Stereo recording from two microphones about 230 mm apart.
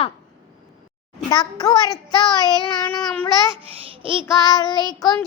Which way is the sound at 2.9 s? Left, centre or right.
Centre.